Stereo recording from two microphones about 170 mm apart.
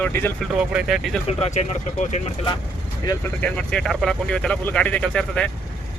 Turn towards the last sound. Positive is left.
turn(degrees=5)  # may be behind; listen again after turning